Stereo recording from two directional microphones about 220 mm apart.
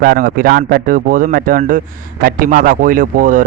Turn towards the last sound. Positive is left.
turn(degrees=-40)  # may be behind; listen again after turning